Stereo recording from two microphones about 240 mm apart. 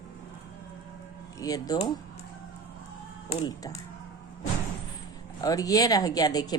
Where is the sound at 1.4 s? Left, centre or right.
Centre.